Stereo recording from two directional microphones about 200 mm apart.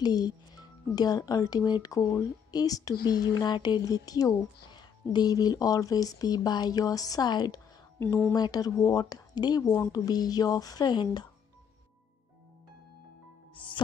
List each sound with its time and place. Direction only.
0.0 s speech: 20° left (ahead or behind)
8.0 s speech: 10° left (ahead or behind)